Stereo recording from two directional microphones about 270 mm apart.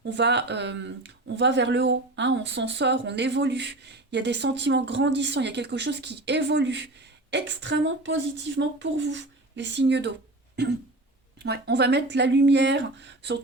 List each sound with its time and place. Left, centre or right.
0.1 s speech: right